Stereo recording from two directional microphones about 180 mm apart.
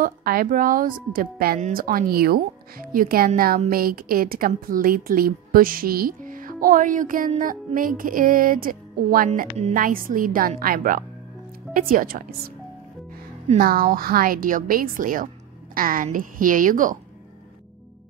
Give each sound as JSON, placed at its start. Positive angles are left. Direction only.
{"t": 0.0, "sound": "speech", "side_deg": -55}
{"t": 13.6, "sound": "speech", "side_deg": -55}